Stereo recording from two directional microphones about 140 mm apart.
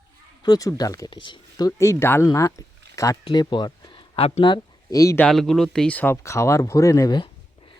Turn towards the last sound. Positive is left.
turn(degrees=30)  # may be behind; listen again after turning